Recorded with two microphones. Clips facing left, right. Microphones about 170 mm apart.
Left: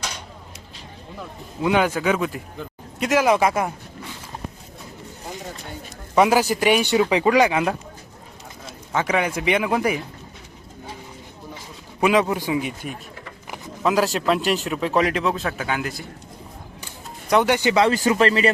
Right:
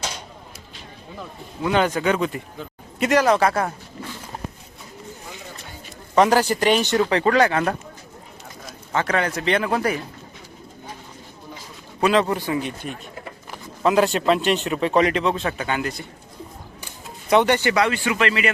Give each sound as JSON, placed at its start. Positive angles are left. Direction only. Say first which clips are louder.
{"t": 1.6, "sound": "speech", "louder": "even", "side_deg": 10}
{"t": 6.1, "sound": "speech", "louder": "even", "side_deg": 10}
{"t": 8.9, "sound": "speech", "louder": "even", "side_deg": 10}
{"t": 11.9, "sound": "speech", "louder": "even", "side_deg": 10}
{"t": 17.2, "sound": "speech", "louder": "right 1 dB", "side_deg": 0}
{"t": 17.5, "sound": "speech", "louder": "left 1 dB", "side_deg": 15}
{"t": 17.8, "sound": "speech", "louder": "left 4 dB", "side_deg": 35}